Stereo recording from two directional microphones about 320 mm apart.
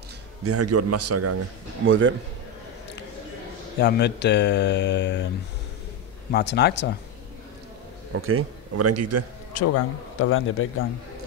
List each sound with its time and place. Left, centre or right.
0.4 s a man's voice: right
1.9 s a man's voice: right
3.8 s speech: left
6.3 s speech: left
8.1 s a man's voice: right
9.5 s speech: left